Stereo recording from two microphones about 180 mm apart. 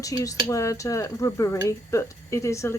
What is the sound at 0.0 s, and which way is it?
Speech, 20° left (ahead or behind).